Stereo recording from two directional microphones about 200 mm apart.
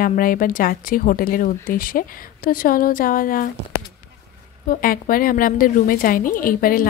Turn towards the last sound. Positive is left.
turn(degrees=45)  # may be behind; listen again after turning